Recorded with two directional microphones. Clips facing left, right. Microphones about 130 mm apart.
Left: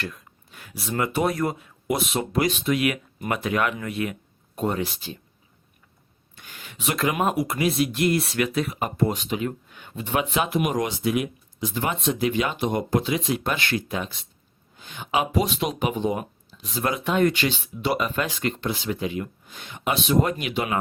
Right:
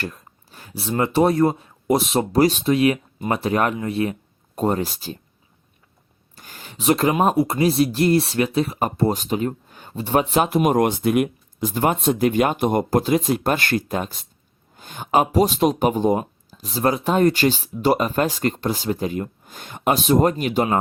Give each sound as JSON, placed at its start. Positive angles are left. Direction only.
{"t": 0.0, "sound": "speech", "side_deg": -35}
{"t": 6.3, "sound": "speech", "side_deg": -40}